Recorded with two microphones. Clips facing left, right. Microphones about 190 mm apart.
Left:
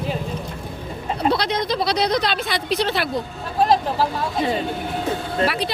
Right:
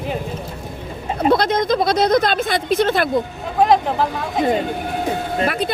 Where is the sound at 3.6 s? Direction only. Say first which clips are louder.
Right 3 dB; 20° right (ahead or behind).